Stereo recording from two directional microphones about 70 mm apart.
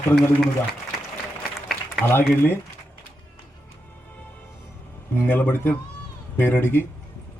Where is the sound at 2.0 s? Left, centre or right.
Left.